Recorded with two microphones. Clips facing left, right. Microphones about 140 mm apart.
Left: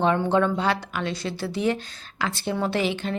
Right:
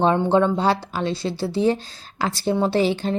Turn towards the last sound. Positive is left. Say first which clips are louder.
# right 5 dB
turn(degrees=-35)  # may be behind; listen again after turning